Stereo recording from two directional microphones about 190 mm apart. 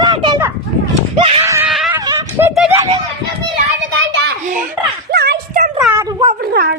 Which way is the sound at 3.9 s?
75° right (ahead or behind).